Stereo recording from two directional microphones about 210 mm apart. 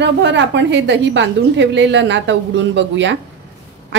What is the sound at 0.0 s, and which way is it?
A woman's voice, 55° right (ahead or behind).